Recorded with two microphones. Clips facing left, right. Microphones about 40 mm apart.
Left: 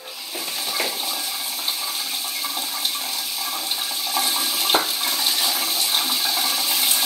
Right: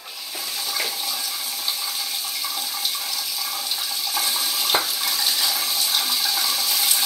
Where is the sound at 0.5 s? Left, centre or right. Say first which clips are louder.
Left 2 dB; left.